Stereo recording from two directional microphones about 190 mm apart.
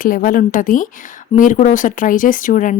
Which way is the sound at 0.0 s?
45° left (ahead or behind).